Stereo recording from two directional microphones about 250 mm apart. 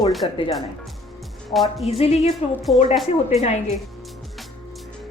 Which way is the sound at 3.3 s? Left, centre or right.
Left.